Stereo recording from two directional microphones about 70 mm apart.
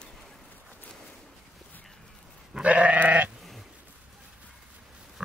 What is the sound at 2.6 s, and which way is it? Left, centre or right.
Goat, centre.